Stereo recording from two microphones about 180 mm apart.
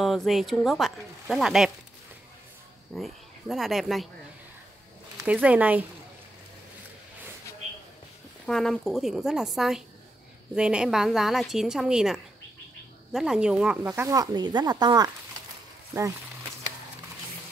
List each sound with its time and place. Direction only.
0.0 s a woman's voice: centre (ahead or behind)
3.0 s a woman's voice: centre (ahead or behind)
5.2 s speech: 10° right (ahead or behind)
8.5 s a woman's voice: 5° left (ahead or behind)
14.0 s speech: 20° right (ahead or behind)